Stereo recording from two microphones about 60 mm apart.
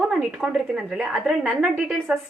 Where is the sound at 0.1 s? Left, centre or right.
Centre.